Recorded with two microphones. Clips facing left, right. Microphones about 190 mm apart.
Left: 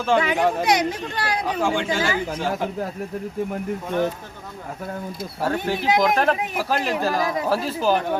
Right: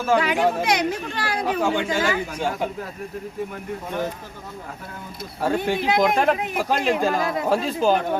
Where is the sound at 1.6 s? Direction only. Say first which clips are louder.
Left 1 dB; 5° right (ahead or behind).